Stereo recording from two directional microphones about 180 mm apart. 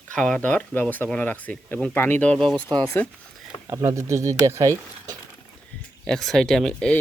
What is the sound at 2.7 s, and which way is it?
Speech, 25° right (ahead or behind).